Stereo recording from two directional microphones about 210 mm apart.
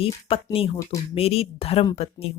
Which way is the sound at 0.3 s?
25° left (ahead or behind).